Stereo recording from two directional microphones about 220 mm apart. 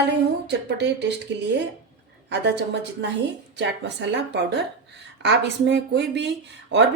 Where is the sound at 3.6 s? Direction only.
55° right (ahead or behind).